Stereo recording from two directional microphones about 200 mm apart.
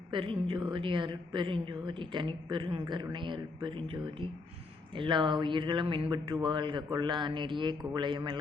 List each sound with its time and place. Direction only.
0.1 s a woman's voice: 25° right (ahead or behind)